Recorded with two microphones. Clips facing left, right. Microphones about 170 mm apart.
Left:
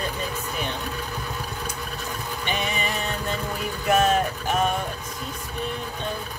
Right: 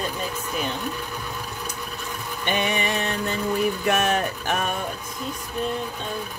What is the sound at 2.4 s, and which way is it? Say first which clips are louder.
Music: right 4 dB; 65° right (ahead or behind).